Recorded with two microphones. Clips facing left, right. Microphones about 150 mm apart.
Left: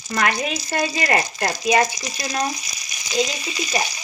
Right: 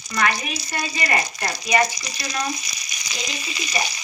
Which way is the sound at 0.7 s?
45° left (ahead or behind).